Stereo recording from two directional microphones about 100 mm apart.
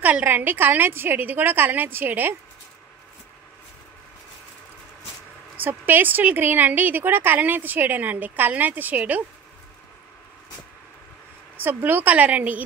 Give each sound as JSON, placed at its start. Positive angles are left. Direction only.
{"t": 0.0, "sound": "a woman's voice", "side_deg": -15}
{"t": 5.6, "sound": "a woman's voice", "side_deg": -20}
{"t": 11.5, "sound": "a woman's voice", "side_deg": -20}